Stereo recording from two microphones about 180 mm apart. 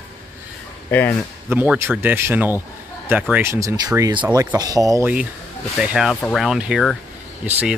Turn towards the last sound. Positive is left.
turn(degrees=-10)  # may be behind; listen again after turning